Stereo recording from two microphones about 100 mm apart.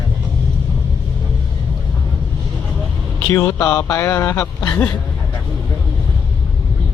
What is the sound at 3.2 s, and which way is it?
Speech, 30° left (ahead or behind).